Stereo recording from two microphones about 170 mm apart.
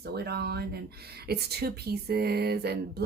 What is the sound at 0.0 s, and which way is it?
A woman's voice, 70° right (ahead or behind).